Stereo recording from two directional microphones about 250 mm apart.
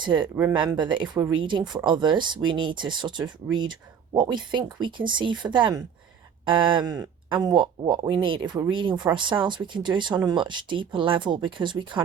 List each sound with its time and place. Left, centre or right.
0.0 s speech: centre